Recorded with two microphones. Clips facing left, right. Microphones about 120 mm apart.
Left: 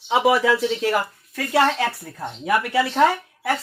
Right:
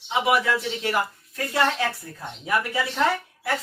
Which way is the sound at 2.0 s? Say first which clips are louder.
Left 5 dB; 80° left.